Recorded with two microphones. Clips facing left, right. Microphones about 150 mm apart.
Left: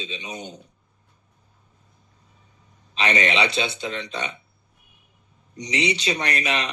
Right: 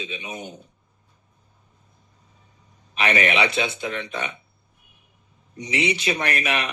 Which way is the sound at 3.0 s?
30° left (ahead or behind).